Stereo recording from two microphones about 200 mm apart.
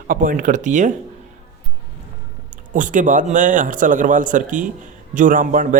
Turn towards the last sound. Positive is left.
turn(degrees=-40)  # may be behind; listen again after turning